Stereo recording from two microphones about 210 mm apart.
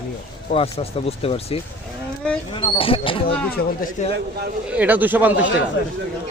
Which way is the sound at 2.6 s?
25° left (ahead or behind).